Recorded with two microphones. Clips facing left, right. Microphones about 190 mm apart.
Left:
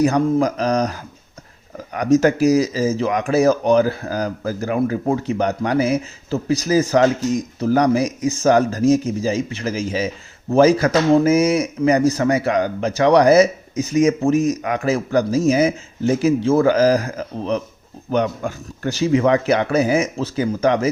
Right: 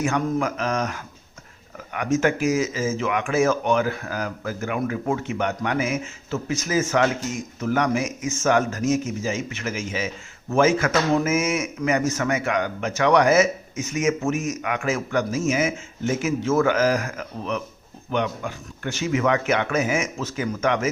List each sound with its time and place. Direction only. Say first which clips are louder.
0.0 s speech: left 7 dB; 35° left (ahead or behind)